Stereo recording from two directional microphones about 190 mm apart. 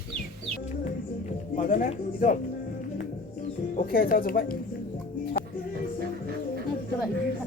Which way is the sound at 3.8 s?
45° left (ahead or behind).